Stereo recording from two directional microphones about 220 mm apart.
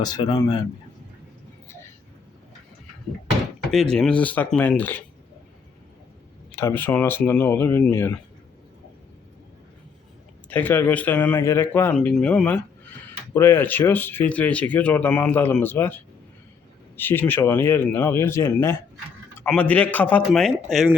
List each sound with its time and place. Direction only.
0.0 s speech: 20° left (ahead or behind)
3.7 s speech: centre (ahead or behind)
6.5 s speech: 10° left (ahead or behind)
10.5 s speech: 10° left (ahead or behind)
17.0 s speech: 10° left (ahead or behind)